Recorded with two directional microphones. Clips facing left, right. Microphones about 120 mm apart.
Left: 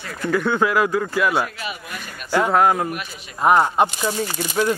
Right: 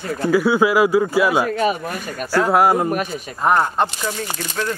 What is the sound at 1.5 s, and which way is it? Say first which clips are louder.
Speech: right 12 dB; 45° right (ahead or behind).